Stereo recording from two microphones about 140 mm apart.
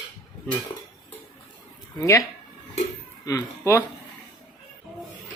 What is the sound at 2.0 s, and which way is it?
Speech, 20° left (ahead or behind).